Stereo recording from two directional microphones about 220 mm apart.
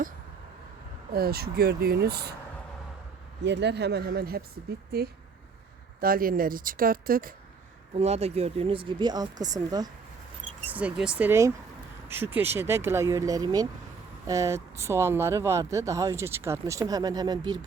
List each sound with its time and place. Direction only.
1.1 s speech: 45° right (ahead or behind)
3.4 s speech: 50° right (ahead or behind)
7.9 s speech: 30° right (ahead or behind)
10.7 s speech: 5° right (ahead or behind)